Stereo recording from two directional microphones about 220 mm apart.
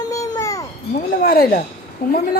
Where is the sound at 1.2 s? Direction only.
45° left (ahead or behind).